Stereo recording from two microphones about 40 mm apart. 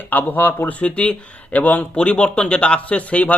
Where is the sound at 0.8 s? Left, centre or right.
Left.